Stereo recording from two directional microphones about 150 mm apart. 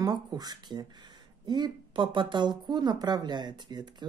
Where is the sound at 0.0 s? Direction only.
25° right (ahead or behind).